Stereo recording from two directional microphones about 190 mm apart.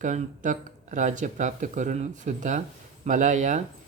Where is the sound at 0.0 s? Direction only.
40° right (ahead or behind).